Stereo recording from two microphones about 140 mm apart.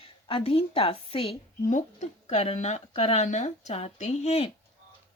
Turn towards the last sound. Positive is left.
turn(degrees=55)  # may be behind; listen again after turning